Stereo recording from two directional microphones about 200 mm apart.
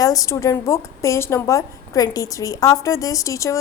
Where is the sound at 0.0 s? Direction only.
15° left (ahead or behind).